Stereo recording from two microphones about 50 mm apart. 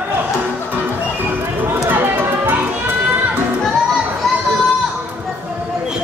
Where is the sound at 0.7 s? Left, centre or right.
Right.